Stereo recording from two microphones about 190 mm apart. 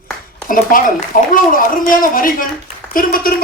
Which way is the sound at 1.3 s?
45° left (ahead or behind).